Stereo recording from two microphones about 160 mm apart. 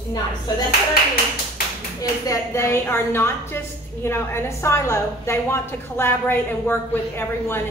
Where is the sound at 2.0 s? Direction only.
20° left (ahead or behind).